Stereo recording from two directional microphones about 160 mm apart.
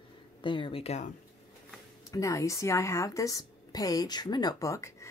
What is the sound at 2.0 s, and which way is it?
A woman's voice, 20° left (ahead or behind).